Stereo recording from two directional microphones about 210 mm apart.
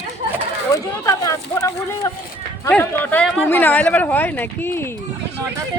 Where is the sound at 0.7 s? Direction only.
15° left (ahead or behind).